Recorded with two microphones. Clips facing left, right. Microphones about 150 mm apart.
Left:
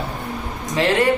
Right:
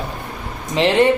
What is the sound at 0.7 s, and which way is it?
Speech, 20° right (ahead or behind).